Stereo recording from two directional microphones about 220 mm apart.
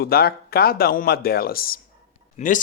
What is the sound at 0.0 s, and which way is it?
Speech, 45° left (ahead or behind).